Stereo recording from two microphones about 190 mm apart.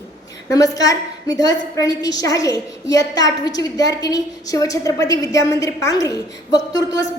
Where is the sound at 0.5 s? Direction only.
20° left (ahead or behind).